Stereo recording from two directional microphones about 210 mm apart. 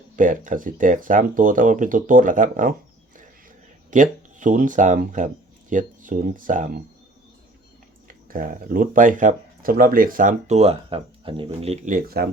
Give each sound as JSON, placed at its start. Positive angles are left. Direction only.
{"t": 0.2, "sound": "speech", "side_deg": -40}
{"t": 3.9, "sound": "speech", "side_deg": -35}
{"t": 8.0, "sound": "speech", "side_deg": -40}